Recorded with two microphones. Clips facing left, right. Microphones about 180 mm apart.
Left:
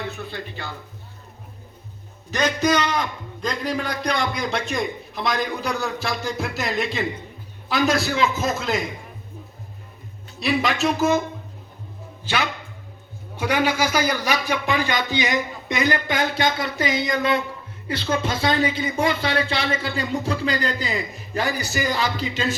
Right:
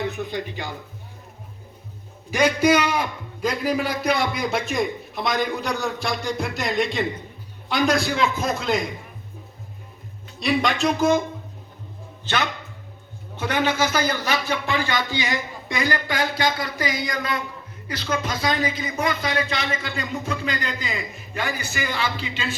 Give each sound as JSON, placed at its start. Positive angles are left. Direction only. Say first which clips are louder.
{"t": 0.0, "sound": "speech", "louder": "right 4 dB", "side_deg": -15}
{"t": 2.3, "sound": "a man's voice", "louder": "right 3 dB", "side_deg": -10}
{"t": 10.4, "sound": "a man's voice", "louder": "even", "side_deg": 0}
{"t": 12.2, "sound": "a man's voice", "louder": "even", "side_deg": 10}